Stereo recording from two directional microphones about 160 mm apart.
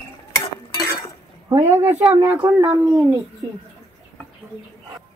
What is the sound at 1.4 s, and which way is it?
Speech, 15° right (ahead or behind).